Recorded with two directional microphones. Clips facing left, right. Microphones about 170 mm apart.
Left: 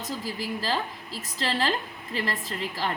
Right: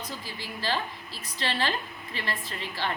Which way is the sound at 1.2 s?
40° left (ahead or behind).